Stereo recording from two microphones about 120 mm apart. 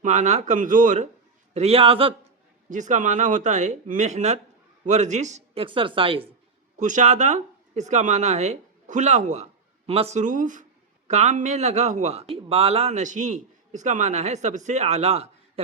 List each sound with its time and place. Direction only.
0.0 s speech: 85° right
1.5 s speech: 55° right (ahead or behind)
2.6 s a man's voice: 90° right
5.5 s speech: 45° right (ahead or behind)
6.7 s speech: 90° right; by 10.2 s 55° right (ahead or behind)
10.2 s a man's voice: 90° right; by 15.6 s 60° right (ahead or behind)